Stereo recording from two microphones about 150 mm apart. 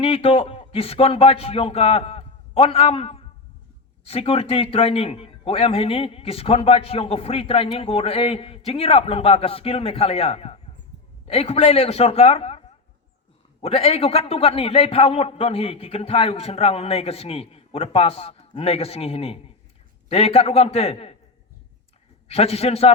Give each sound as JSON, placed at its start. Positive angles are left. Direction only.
{"t": 0.0, "sound": "a man's voice", "side_deg": 40}
{"t": 22.3, "sound": "a man's voice", "side_deg": 40}